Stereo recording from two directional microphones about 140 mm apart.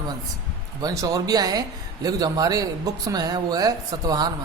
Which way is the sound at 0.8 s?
25° right (ahead or behind).